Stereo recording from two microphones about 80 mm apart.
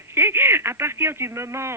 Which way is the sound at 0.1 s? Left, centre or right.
Right.